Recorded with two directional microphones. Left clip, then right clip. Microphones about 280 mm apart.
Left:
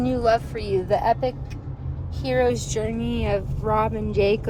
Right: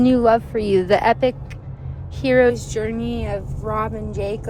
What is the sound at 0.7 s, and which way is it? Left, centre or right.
Speech, right.